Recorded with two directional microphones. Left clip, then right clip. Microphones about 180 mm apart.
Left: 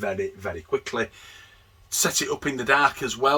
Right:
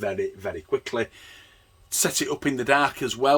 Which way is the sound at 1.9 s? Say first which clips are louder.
Left 1 dB; 55° right (ahead or behind).